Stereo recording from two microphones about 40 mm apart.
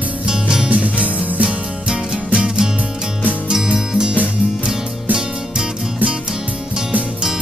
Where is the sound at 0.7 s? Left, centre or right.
Right.